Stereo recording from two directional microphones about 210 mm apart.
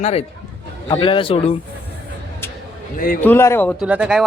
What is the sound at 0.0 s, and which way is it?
A man's voice, 30° left (ahead or behind).